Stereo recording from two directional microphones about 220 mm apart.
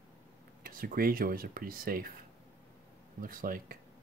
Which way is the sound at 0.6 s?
40° right (ahead or behind).